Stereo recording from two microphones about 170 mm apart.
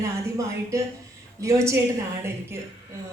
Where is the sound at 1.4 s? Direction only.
15° right (ahead or behind).